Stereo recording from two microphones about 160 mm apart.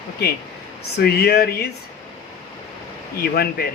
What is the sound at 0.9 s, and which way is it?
Speech, 85° left.